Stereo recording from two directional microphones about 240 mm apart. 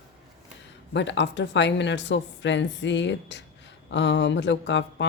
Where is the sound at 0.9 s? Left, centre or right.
Left.